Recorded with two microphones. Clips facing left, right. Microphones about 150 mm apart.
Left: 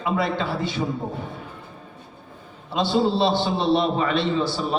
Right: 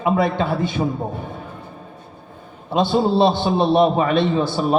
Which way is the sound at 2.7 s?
55° right (ahead or behind).